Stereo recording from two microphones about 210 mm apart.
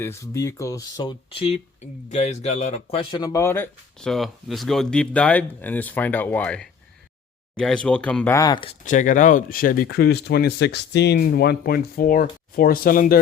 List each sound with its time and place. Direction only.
0.0 s speech: 15° left (ahead or behind)
8.8 s speech: 35° left (ahead or behind)